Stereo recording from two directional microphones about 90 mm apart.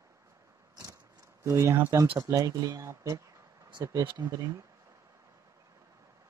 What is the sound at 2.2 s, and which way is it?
Speech, 40° right (ahead or behind).